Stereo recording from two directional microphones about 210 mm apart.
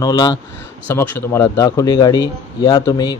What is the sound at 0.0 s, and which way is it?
Speech, 20° left (ahead or behind).